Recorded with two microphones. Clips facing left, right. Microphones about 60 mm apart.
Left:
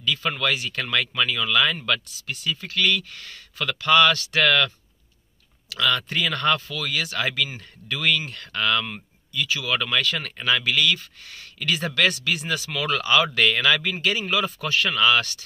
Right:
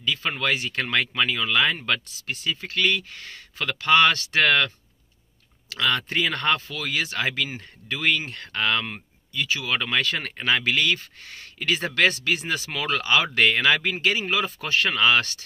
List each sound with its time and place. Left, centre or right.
0.0 s speech: right